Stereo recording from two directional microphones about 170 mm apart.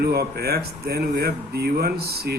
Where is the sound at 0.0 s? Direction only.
70° right (ahead or behind).